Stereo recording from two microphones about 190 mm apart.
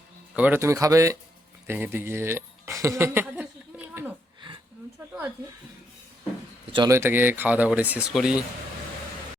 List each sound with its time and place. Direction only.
0.3 s speech: 10° right (ahead or behind)
1.6 s a sound: 10° right (ahead or behind)
6.7 s speech: 15° right (ahead or behind)